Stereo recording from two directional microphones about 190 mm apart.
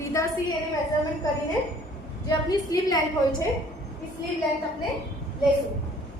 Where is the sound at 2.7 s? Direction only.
20° left (ahead or behind).